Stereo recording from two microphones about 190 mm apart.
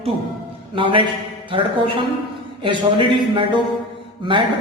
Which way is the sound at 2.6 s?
25° right (ahead or behind).